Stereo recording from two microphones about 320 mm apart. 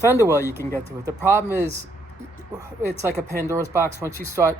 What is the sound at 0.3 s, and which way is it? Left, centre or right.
Speech, centre.